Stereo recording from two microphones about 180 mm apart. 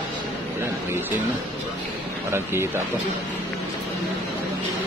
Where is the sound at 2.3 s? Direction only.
15° right (ahead or behind).